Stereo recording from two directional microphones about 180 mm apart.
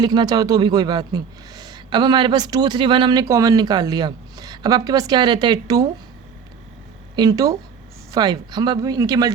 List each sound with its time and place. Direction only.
0.0 s speech: 25° right (ahead or behind)
7.2 s speech: 20° right (ahead or behind)